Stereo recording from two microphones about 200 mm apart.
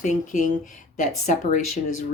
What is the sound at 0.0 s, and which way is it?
Speech, 40° left (ahead or behind).